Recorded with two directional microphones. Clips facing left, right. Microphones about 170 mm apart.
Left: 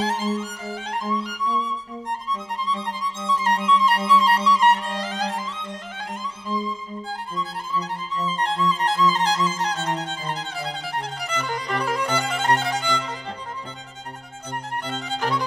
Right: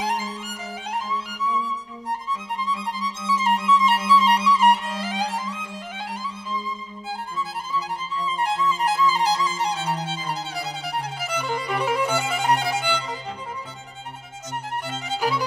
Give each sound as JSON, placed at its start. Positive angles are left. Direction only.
{"t": 0.0, "sound": "music", "side_deg": -15}
{"t": 2.7, "sound": "music", "side_deg": -10}
{"t": 8.4, "sound": "music", "side_deg": -5}
{"t": 14.9, "sound": "music", "side_deg": -5}